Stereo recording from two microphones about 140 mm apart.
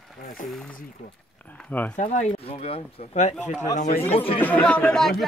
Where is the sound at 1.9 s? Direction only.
55° left (ahead or behind).